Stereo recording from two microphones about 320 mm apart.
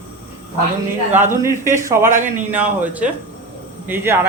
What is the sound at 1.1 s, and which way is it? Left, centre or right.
Speech, centre.